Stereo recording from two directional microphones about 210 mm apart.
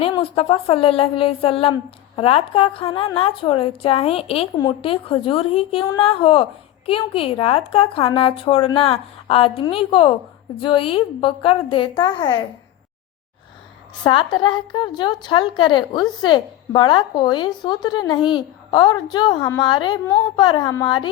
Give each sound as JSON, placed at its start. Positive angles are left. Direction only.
{"t": 0.0, "sound": "a woman's voice", "side_deg": 25}
{"t": 14.0, "sound": "a woman's voice", "side_deg": 20}